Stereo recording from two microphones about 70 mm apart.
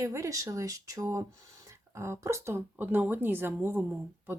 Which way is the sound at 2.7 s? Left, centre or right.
Right.